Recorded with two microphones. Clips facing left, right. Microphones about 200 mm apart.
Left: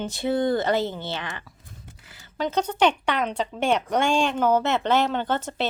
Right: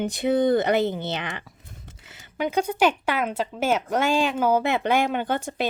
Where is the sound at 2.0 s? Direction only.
20° right (ahead or behind).